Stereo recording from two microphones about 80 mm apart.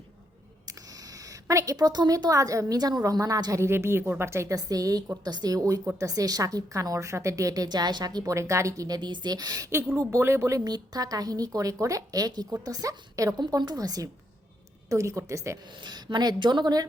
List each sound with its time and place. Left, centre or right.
0.6 s a woman's voice: right
5.2 s a woman's voice: right
9.0 s speech: right
9.6 s speech: right
10.6 s a woman's voice: right
13.6 s a woman's voice: right
15.8 s speech: right